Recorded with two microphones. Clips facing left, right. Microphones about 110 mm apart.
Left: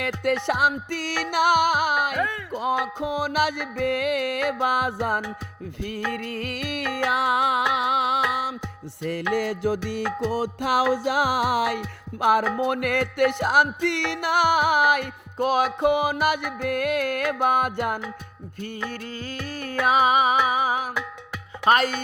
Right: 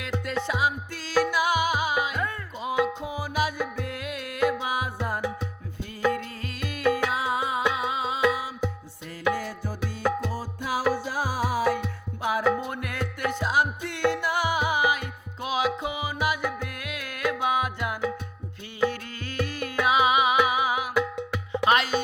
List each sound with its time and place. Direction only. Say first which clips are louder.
0.0 s music: left 6 dB; 60° left (ahead or behind)
6.3 s music: left 6 dB; 65° left (ahead or behind)
9.3 s music: left 8 dB; 85° left
10.9 s music: left 6 dB; 90° left
12.6 s music: left 9 dB; 65° left (ahead or behind)
15.4 s music: left 7 dB; 55° left (ahead or behind)
15.8 s music: left 8 dB; 65° left (ahead or behind)
18.9 s music: even; 40° left (ahead or behind)